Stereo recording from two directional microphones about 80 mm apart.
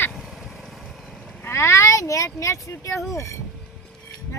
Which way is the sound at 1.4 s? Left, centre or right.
Left.